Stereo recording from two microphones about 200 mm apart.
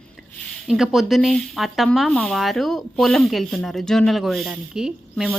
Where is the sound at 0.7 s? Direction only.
Centre (ahead or behind).